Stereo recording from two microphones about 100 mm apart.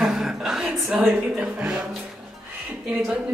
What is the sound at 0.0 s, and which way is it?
Music, 5° right (ahead or behind).